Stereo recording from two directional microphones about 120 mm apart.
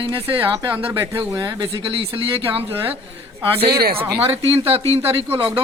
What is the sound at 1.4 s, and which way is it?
Speech, 35° right (ahead or behind).